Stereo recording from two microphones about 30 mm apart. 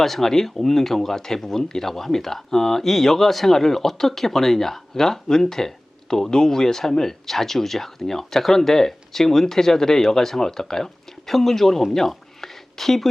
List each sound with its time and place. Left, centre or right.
0.0 s speech: centre
11.3 s speech: centre